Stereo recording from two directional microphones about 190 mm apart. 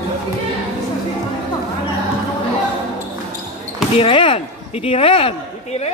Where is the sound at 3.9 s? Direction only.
30° left (ahead or behind).